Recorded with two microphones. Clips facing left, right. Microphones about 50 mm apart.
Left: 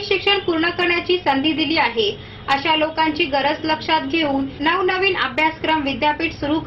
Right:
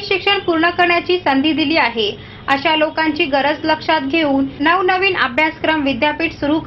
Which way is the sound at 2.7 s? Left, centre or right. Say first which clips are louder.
Right 3 dB; right.